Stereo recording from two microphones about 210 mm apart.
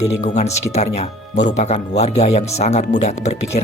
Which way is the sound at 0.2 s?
35° left (ahead or behind).